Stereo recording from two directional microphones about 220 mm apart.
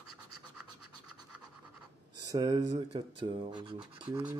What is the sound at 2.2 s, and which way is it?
Speech, 20° right (ahead or behind).